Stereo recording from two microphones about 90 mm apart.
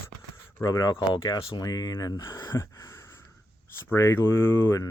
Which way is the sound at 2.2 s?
35° left (ahead or behind).